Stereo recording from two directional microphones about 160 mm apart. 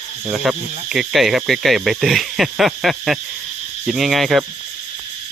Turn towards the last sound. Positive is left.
turn(degrees=0)  # may be behind; listen again after turning